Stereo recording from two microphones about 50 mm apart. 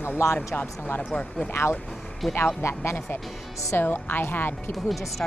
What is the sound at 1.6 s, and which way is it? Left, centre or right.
Speech, left.